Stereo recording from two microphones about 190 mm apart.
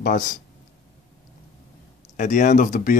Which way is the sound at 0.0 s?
45° left (ahead or behind).